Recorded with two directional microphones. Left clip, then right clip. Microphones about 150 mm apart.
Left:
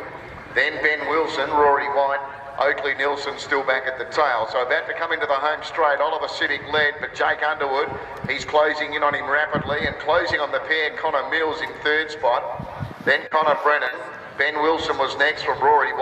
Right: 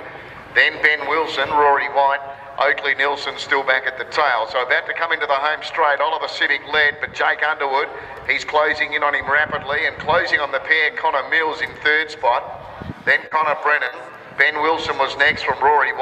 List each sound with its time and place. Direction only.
0.6 s a man's voice: 30° right (ahead or behind)